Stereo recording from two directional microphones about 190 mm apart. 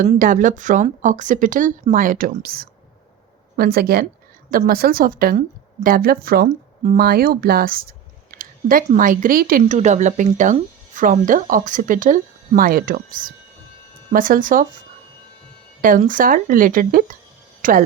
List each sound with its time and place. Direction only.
0.1 s speech: 45° right (ahead or behind)
15.8 s speech: 45° right (ahead or behind)